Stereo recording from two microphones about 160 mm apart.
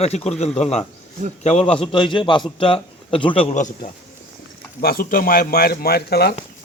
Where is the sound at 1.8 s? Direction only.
30° left (ahead or behind).